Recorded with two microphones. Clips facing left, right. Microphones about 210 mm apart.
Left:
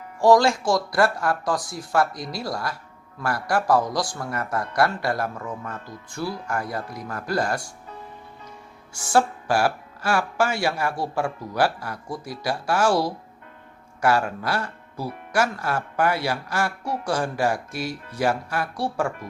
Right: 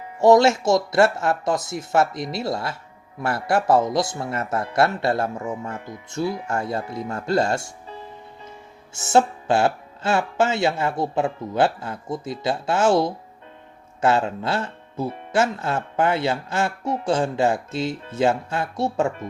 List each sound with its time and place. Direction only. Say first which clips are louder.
0.2 s speech: right 2 dB; 25° right (ahead or behind)